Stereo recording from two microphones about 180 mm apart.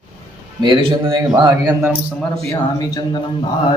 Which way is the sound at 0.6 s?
25° right (ahead or behind).